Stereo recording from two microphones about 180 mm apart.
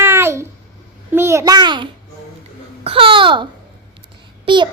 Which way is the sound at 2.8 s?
30° right (ahead or behind).